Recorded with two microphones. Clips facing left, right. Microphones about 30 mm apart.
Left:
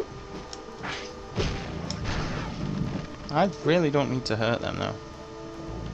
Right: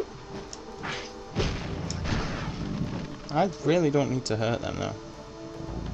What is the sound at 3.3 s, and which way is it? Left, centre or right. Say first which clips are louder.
Speech: left 1 dB; left.